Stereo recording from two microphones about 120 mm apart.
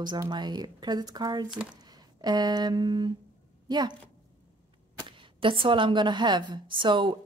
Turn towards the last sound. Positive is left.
turn(degrees=-40)  # may be behind; listen again after turning